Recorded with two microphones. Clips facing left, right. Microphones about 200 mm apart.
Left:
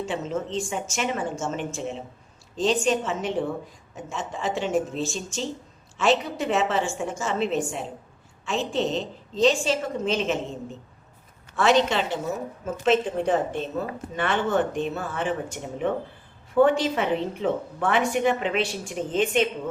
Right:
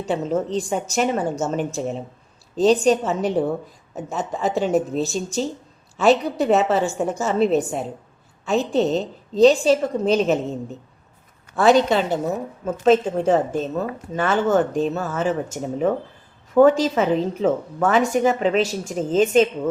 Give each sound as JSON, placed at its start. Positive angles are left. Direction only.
{"t": 0.0, "sound": "a woman's voice", "side_deg": -35}
{"t": 11.5, "sound": "a woman's voice", "side_deg": -35}
{"t": 14.2, "sound": "a woman's voice", "side_deg": -45}